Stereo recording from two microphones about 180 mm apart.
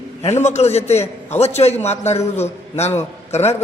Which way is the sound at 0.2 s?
35° left (ahead or behind).